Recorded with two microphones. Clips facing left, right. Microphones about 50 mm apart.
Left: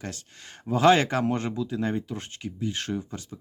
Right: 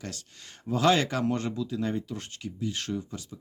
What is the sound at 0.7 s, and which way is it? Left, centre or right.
Speech, left.